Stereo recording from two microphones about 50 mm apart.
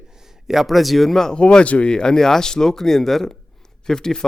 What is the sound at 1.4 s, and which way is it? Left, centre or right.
A man's voice, left.